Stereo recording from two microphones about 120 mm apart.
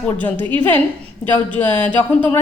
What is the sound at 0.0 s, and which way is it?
A woman's voice, 15° left (ahead or behind).